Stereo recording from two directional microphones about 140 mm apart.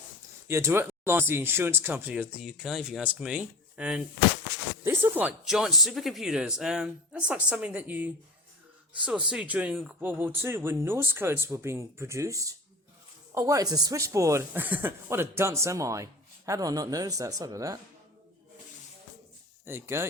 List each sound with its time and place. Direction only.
0.4 s speech: 20° right (ahead or behind)
5.5 s speech: centre (ahead or behind); by 17.7 s 25° right (ahead or behind)
19.6 s speech: 15° right (ahead or behind)